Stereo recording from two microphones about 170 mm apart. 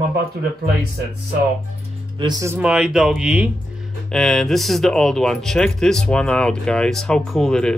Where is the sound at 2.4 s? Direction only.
10° right (ahead or behind).